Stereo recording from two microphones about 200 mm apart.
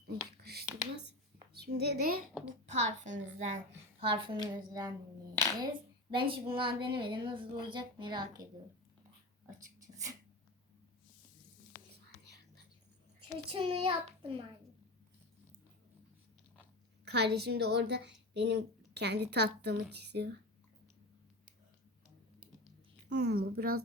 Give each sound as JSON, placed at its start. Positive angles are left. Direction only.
{"t": 0.1, "sound": "whispering", "side_deg": -50}
{"t": 1.5, "sound": "speech", "side_deg": -55}
{"t": 2.6, "sound": "a woman's voice", "side_deg": -35}
{"t": 4.0, "sound": "a woman's voice", "side_deg": -25}
{"t": 9.8, "sound": "a sound", "side_deg": -15}
{"t": 13.5, "sound": "a woman's voice", "side_deg": -25}
{"t": 17.1, "sound": "a woman's voice", "side_deg": -55}
{"t": 23.0, "sound": "speech", "side_deg": -55}